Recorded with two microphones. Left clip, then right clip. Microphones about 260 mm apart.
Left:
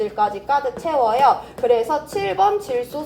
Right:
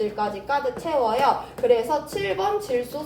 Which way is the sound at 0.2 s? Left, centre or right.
Centre.